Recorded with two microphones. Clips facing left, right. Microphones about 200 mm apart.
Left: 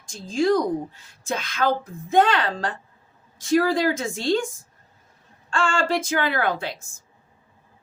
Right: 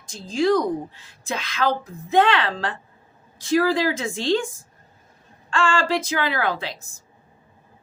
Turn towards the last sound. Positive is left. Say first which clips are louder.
# left 1 dB
turn(degrees=50)  # may be behind; listen again after turning